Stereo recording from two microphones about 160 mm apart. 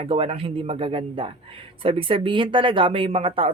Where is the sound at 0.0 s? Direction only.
35° right (ahead or behind).